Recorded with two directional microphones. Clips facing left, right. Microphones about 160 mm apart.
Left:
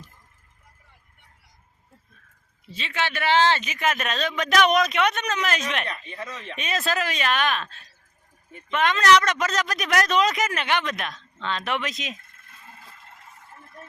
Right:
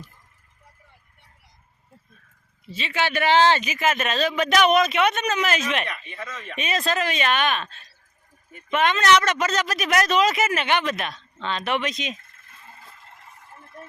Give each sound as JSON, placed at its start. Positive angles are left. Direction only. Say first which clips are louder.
{"t": 2.7, "sound": "a man's voice", "louder": "right 4 dB", "side_deg": -5}
{"t": 5.9, "sound": "speech", "louder": "even", "side_deg": 25}
{"t": 6.6, "sound": "a man's voice", "louder": "right 2 dB", "side_deg": 0}